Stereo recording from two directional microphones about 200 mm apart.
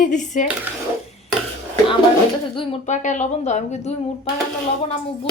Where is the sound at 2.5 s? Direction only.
25° left (ahead or behind).